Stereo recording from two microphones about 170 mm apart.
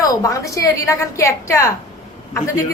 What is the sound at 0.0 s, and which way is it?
Speech, 20° left (ahead or behind).